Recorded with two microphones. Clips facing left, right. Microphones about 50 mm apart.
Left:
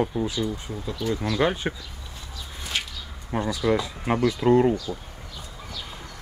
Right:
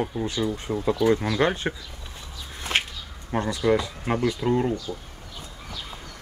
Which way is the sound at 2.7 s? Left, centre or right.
Right.